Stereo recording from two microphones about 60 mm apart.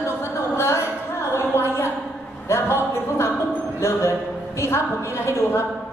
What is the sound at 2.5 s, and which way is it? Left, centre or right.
Speech, left.